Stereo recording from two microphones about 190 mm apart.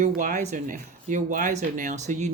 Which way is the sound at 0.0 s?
45° right (ahead or behind).